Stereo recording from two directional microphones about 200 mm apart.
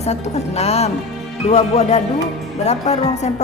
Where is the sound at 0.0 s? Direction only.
30° left (ahead or behind).